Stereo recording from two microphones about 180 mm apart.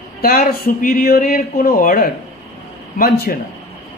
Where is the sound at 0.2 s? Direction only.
55° left (ahead or behind).